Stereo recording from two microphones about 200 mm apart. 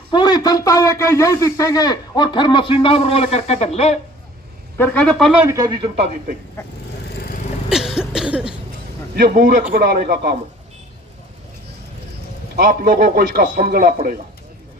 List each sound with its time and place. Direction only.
0.1 s a man's voice: 20° left (ahead or behind)
4.8 s speech: 5° left (ahead or behind)
5.3 s speech: 10° right (ahead or behind)
7.1 s vehicle: 50° left (ahead or behind)
7.7 s cough: centre (ahead or behind)
9.1 s a man's voice: 50° right (ahead or behind)
12.5 s a man's voice: 45° right (ahead or behind)